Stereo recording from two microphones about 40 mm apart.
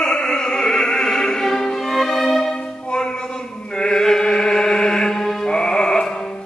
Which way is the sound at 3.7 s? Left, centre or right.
Centre.